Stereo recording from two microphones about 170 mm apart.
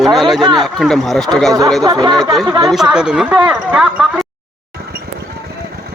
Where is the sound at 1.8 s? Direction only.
20° right (ahead or behind).